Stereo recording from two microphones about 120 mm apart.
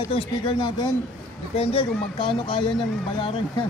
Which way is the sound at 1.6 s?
50° left (ahead or behind).